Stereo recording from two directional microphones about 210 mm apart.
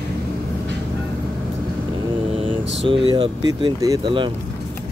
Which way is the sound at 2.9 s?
25° right (ahead or behind).